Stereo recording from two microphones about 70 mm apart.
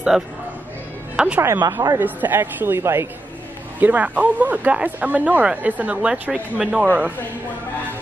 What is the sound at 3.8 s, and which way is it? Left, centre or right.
Speech, right.